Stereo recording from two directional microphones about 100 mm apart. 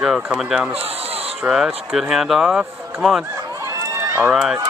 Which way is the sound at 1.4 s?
5° right (ahead or behind).